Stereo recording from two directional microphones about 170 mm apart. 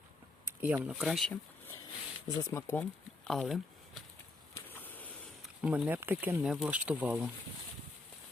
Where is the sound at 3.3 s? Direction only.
Centre (ahead or behind).